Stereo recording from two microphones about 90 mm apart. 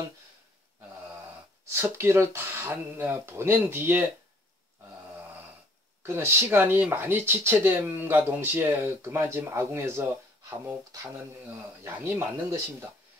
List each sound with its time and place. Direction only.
1.7 s speech: 30° right (ahead or behind)
6.0 s speech: 30° right (ahead or behind)
10.8 s speech: 40° right (ahead or behind)